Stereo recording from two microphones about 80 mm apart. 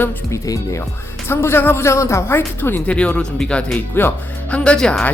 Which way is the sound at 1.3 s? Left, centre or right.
Left.